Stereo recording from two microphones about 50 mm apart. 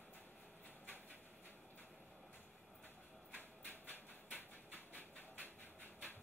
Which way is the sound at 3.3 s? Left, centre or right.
Left.